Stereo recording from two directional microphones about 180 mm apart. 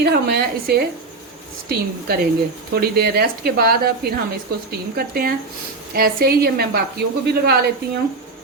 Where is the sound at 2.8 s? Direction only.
60° right (ahead or behind).